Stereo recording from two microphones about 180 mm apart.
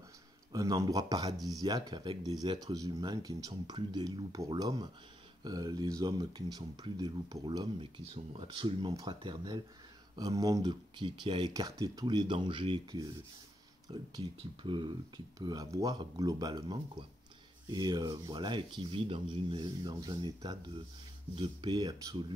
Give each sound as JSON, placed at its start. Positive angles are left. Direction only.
{"t": 0.5, "sound": "speech", "side_deg": -20}